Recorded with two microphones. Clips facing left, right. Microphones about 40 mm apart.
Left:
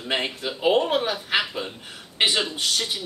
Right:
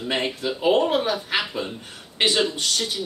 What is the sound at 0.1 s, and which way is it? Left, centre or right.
Speech, centre.